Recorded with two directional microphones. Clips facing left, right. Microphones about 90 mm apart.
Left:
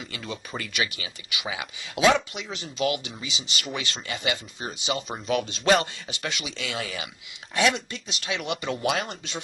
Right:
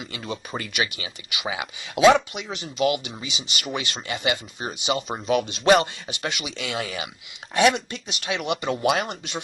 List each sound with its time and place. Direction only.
0.1 s speech: 25° right (ahead or behind)
6.8 s speech: 30° right (ahead or behind)
7.5 s speech: 20° right (ahead or behind)